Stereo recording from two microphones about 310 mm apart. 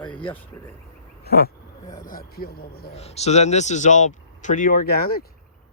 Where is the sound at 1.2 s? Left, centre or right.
Left.